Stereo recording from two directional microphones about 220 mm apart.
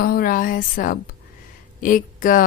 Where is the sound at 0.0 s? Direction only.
40° left (ahead or behind).